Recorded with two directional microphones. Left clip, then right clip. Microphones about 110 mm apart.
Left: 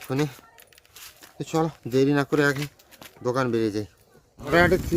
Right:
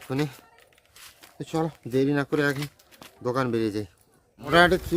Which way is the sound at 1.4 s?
30° left (ahead or behind).